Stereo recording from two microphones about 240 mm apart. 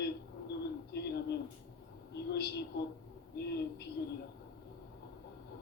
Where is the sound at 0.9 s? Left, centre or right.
Left.